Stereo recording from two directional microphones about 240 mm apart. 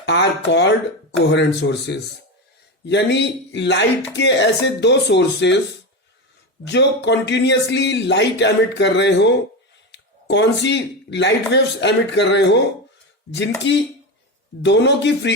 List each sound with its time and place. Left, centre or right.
0.0 s speech: left
6.7 s speech: left
13.7 s speech: left